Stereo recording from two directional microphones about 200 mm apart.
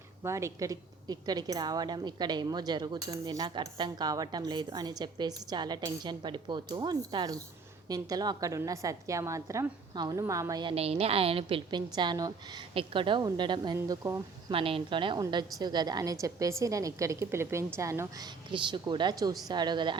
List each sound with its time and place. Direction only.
0.2 s a woman's voice: 15° right (ahead or behind)